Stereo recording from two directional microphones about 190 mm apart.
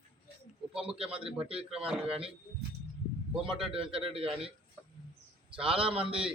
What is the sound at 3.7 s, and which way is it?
Speech, 30° right (ahead or behind).